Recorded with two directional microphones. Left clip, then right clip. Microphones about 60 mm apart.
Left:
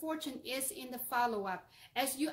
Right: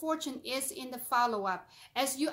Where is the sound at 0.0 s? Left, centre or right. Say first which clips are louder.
Right 5 dB; right.